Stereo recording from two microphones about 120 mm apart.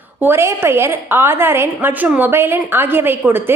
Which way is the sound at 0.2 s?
20° right (ahead or behind).